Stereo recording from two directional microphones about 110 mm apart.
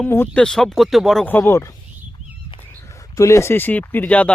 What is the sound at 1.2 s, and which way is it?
Speech, 20° left (ahead or behind).